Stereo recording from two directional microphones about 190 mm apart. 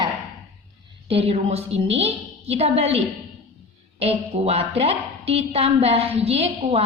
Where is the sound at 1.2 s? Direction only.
35° right (ahead or behind).